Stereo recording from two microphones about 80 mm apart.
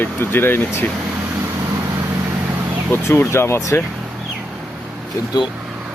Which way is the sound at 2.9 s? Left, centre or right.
Left.